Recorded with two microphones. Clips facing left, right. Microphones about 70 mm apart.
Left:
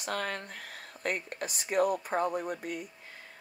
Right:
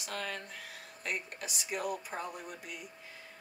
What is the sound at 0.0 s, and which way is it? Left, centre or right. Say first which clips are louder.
Speech: left 5 dB; left.